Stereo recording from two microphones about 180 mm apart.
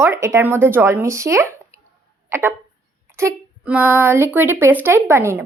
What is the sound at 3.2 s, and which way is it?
A woman's voice, 10° right (ahead or behind).